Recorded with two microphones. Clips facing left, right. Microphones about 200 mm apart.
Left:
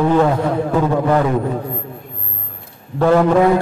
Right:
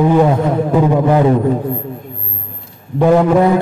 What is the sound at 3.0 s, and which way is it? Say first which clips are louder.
Speech: right 2 dB; 15° right (ahead or behind).